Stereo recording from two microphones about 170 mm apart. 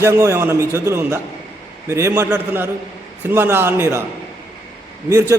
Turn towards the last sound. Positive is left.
turn(degrees=-15)  # may be behind; listen again after turning